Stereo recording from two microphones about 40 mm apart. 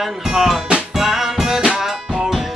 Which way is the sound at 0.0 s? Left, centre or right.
Centre.